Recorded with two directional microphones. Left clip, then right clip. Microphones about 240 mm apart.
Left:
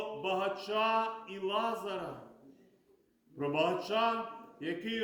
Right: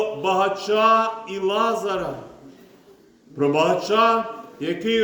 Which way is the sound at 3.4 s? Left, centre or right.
Centre.